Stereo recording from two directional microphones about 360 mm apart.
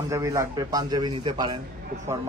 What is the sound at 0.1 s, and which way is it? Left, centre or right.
A man's voice, centre.